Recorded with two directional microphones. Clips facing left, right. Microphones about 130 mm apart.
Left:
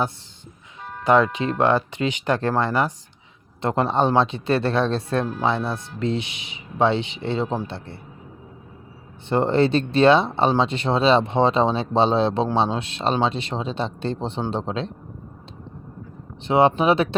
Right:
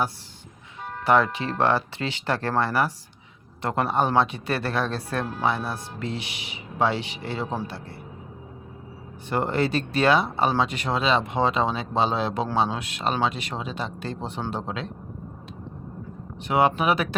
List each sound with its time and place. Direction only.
1.0 s speech: 20° left (ahead or behind)
9.3 s speech: 25° left (ahead or behind)
16.5 s speech: 25° left (ahead or behind)